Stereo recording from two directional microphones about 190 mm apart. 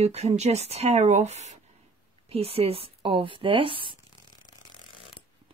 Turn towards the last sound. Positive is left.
turn(degrees=-25)  # may be behind; listen again after turning